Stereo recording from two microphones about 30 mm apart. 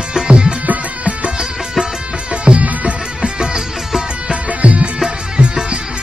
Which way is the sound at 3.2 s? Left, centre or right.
Right.